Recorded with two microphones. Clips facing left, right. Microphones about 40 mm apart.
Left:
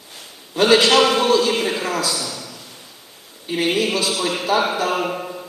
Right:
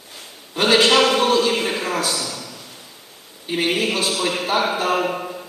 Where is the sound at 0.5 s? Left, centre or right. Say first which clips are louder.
Left 1 dB; right.